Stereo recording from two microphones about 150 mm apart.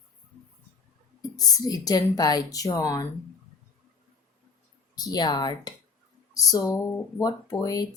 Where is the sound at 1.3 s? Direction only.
25° left (ahead or behind).